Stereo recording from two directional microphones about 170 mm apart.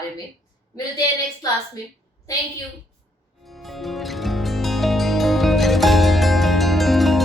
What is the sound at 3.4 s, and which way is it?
Music, centre (ahead or behind).